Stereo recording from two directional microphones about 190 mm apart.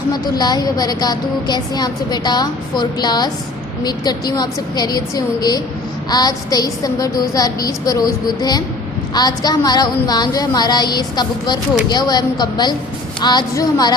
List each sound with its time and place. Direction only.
0.1 s a woman's voice: 20° left (ahead or behind)